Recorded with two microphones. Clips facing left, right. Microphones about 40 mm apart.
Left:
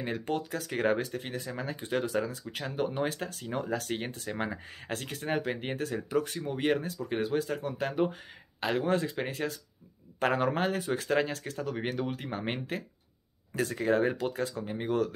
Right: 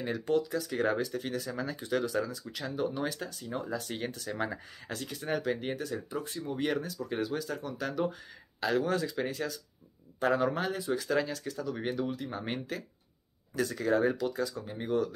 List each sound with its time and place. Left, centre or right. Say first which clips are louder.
0.0 s speech: right 2 dB; left
0.4 s speech: even; left
1.2 s speech: right 1 dB; left
3.3 s speech: left 3 dB; left
3.9 s speech: left 2 dB; left
4.9 s speech: left 2 dB; left
5.8 s speech: left 3 dB; left
6.0 s speech: left 6 dB; left
6.5 s speech: left 3 dB; left
10.2 s speech: left 1 dB; left
12.4 s speech: left 2 dB; left
14.9 s speech: left 1 dB; left